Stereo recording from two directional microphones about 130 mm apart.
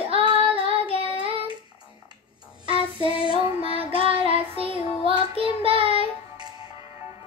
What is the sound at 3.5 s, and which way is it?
Child singing, 45° right (ahead or behind).